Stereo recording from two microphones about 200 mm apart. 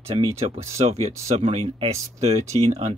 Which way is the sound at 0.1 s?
30° right (ahead or behind).